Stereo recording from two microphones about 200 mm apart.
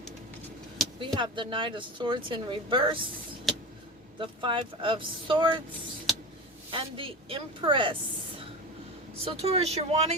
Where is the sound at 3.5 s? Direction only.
Centre (ahead or behind).